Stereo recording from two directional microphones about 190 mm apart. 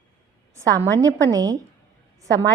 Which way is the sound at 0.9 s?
20° right (ahead or behind).